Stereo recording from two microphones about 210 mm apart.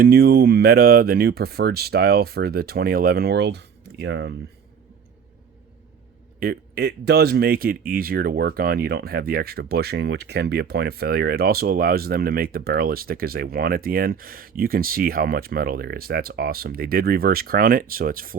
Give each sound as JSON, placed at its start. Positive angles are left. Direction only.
{"t": 0.0, "sound": "speech", "side_deg": -50}
{"t": 6.4, "sound": "speech", "side_deg": -45}